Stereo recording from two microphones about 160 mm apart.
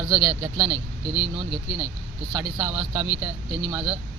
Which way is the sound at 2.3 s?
25° right (ahead or behind).